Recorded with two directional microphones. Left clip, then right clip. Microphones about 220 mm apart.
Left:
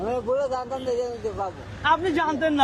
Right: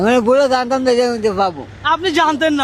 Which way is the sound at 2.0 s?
50° right (ahead or behind).